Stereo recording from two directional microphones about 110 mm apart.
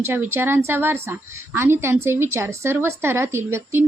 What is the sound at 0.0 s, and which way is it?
Speech, 20° right (ahead or behind).